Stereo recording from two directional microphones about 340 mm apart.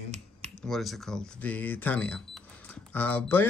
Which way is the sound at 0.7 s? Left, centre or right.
Centre.